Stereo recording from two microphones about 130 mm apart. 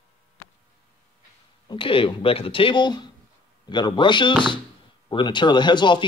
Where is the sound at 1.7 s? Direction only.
40° left (ahead or behind).